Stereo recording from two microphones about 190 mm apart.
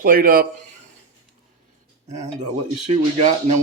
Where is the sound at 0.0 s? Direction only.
50° right (ahead or behind).